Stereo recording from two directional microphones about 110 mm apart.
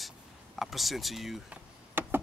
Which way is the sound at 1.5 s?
20° right (ahead or behind).